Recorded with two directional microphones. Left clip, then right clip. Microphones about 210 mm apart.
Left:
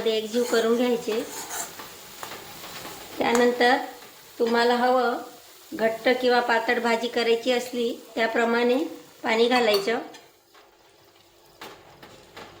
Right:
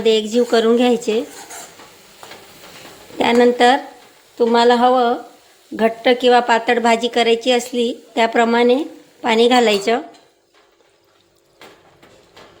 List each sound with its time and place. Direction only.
0.0 s speech: 40° right (ahead or behind)
3.2 s a woman's voice: 45° right (ahead or behind)